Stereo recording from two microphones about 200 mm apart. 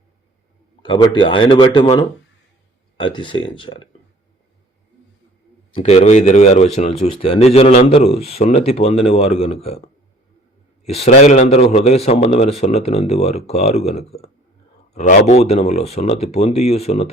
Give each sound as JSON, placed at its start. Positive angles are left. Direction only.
{"t": 0.8, "sound": "speech", "side_deg": 20}
{"t": 5.7, "sound": "a man's voice", "side_deg": 30}